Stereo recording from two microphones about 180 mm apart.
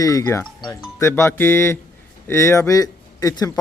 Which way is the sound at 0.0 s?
20° left (ahead or behind).